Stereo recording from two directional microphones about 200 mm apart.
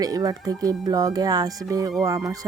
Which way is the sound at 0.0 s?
20° right (ahead or behind).